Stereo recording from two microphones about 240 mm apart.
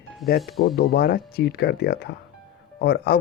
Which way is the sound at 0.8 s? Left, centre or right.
Left.